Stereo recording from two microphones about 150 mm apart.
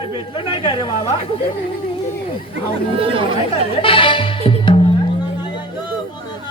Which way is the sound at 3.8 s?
35° left (ahead or behind).